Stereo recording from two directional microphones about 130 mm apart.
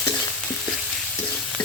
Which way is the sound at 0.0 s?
5° left (ahead or behind).